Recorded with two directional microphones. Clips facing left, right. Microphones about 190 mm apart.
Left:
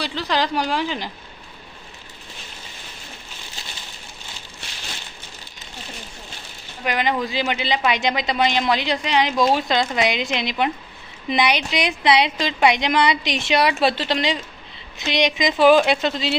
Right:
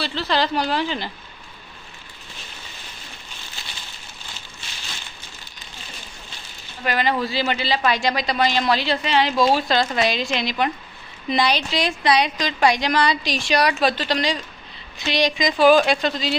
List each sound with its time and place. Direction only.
0.0 s speech: 15° left (ahead or behind)
6.8 s a woman's voice: 15° left (ahead or behind)
9.3 s speech: 5° right (ahead or behind)
9.6 s a woman's voice: 20° left (ahead or behind)